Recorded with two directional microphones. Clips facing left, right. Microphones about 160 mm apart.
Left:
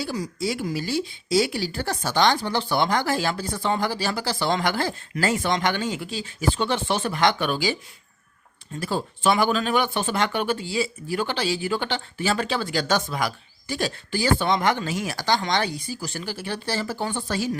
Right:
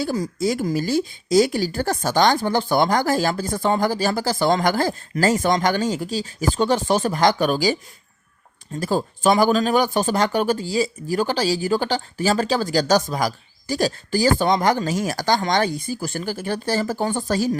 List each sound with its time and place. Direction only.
0.0 s a woman's voice: 45° right (ahead or behind)
8.8 s speech: 40° right (ahead or behind)